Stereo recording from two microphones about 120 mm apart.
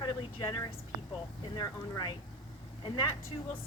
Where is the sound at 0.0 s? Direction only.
45° left (ahead or behind).